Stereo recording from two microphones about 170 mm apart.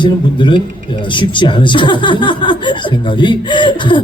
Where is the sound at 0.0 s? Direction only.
30° left (ahead or behind).